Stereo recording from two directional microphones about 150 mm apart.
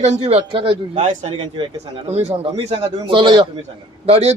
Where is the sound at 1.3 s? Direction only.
35° right (ahead or behind).